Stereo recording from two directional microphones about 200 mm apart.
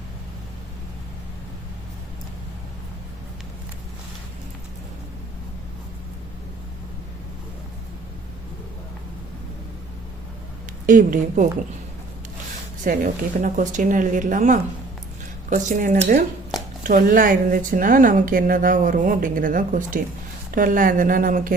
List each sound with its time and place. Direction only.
10.8 s speech: 40° right (ahead or behind)
12.8 s speech: 40° right (ahead or behind)